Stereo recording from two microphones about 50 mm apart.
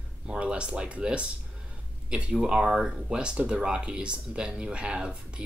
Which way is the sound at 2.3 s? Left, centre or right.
Centre.